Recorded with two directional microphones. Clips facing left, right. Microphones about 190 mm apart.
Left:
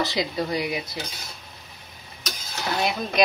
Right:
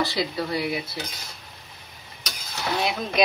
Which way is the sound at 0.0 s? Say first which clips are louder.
Even; 20° left (ahead or behind).